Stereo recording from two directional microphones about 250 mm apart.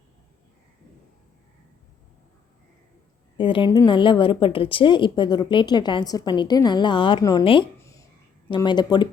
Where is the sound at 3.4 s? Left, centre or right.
Centre.